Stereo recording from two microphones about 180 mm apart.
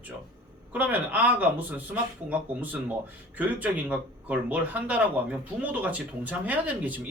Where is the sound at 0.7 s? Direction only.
10° right (ahead or behind).